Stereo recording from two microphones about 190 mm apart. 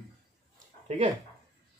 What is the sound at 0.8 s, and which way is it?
Speech, 35° right (ahead or behind).